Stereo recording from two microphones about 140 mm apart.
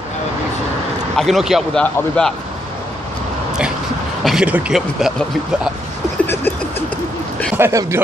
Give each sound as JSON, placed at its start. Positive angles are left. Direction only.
{"t": 1.1, "sound": "speech", "side_deg": 0}
{"t": 4.2, "sound": "speech", "side_deg": -5}
{"t": 6.2, "sound": "a sound", "side_deg": 15}
{"t": 7.5, "sound": "speech", "side_deg": -15}